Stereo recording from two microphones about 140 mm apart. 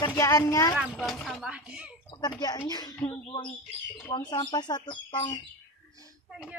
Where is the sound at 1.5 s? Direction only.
10° right (ahead or behind).